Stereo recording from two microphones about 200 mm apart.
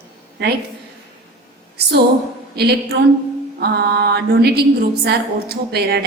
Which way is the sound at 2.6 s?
55° right (ahead or behind).